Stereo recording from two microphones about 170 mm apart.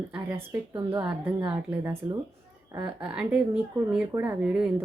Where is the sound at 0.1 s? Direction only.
15° right (ahead or behind).